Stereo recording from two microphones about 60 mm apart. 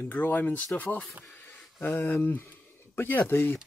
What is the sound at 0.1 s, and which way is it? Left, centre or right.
Speech, left.